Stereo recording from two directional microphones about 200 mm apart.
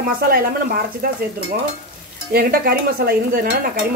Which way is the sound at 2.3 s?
50° right (ahead or behind).